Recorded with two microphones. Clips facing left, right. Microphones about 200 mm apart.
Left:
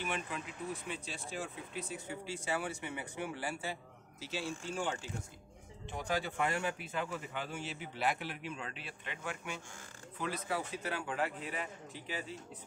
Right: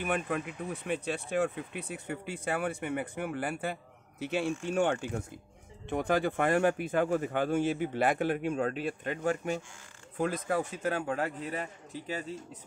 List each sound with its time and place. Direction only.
0.0 s speech: 55° right (ahead or behind)